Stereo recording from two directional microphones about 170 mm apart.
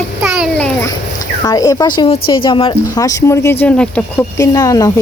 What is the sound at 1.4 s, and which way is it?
Speech, 20° left (ahead or behind).